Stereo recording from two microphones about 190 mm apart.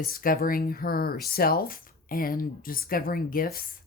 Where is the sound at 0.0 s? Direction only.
50° left (ahead or behind).